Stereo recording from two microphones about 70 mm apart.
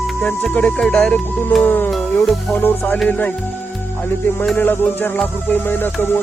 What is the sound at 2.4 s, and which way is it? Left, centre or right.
Speech, left.